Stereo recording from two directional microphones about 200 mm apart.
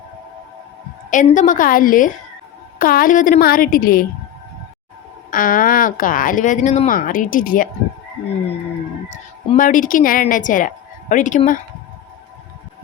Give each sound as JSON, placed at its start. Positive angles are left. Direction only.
{"t": 1.1, "sound": "a woman's voice", "side_deg": 40}
{"t": 5.3, "sound": "a woman's voice", "side_deg": 45}
{"t": 9.0, "sound": "a woman's voice", "side_deg": 35}